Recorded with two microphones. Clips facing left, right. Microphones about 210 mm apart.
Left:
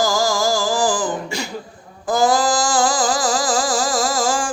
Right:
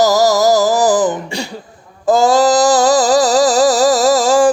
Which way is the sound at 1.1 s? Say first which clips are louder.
Right 3 dB; 30° right (ahead or behind).